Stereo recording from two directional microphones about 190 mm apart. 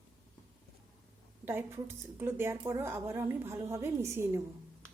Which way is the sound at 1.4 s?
10° right (ahead or behind).